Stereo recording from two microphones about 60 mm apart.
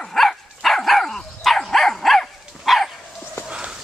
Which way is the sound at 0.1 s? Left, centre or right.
Centre.